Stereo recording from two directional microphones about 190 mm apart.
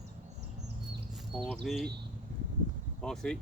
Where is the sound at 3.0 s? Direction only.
5° left (ahead or behind).